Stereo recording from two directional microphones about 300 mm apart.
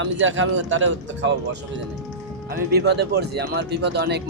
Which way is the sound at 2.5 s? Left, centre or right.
Right.